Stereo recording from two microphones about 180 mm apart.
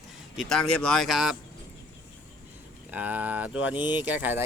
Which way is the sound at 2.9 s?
10° right (ahead or behind).